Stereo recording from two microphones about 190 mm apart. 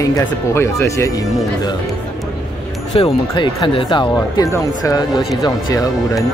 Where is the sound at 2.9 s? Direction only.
30° left (ahead or behind).